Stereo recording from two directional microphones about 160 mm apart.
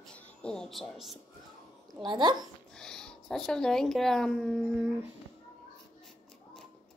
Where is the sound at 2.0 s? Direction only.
30° right (ahead or behind).